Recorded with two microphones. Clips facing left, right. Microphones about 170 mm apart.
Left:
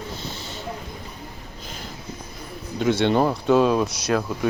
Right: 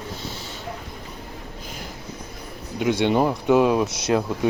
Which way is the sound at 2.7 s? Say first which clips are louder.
Even; 10° right (ahead or behind).